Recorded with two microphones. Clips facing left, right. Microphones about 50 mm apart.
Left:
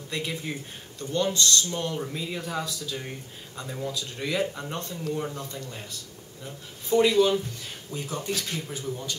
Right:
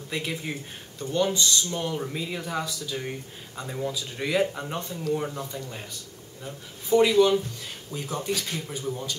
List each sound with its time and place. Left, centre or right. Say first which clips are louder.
0.1 s speech: right 1 dB; centre
8.1 s speech: right 2 dB; centre
8.7 s speech: right 2 dB; centre